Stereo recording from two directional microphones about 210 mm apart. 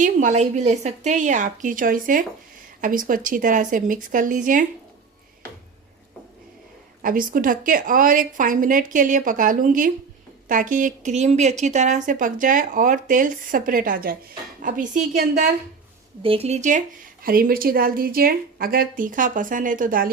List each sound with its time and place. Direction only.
0.0 s speech: 35° right (ahead or behind)
7.0 s speech: 40° right (ahead or behind)
16.2 s speech: 25° right (ahead or behind)